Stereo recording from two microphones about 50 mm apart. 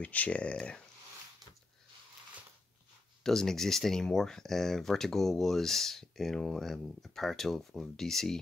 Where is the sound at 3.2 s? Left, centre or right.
Centre.